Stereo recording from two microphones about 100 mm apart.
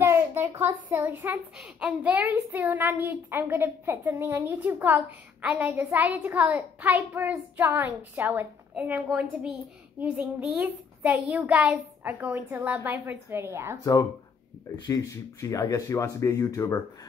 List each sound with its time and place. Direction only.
0.0 s a sound: 25° right (ahead or behind)
0.8 s a woman's voice: 20° right (ahead or behind)
14.9 s speech: 35° left (ahead or behind)